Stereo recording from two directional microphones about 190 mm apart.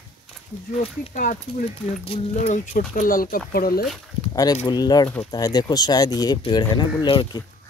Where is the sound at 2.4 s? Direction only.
40° left (ahead or behind).